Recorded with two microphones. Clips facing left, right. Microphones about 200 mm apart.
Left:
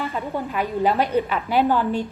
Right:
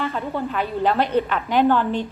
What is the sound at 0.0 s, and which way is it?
A woman's voice, 10° left (ahead or behind).